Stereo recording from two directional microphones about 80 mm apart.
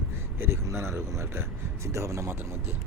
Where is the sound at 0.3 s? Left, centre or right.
Right.